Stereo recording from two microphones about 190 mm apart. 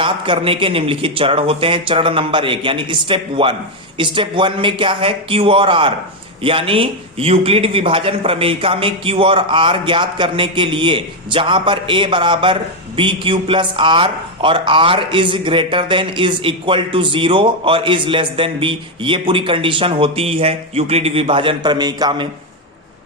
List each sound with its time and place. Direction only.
0.0 s a man's voice: 25° right (ahead or behind)